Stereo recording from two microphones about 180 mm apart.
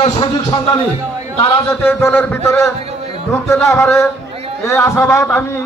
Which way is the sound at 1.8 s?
10° left (ahead or behind).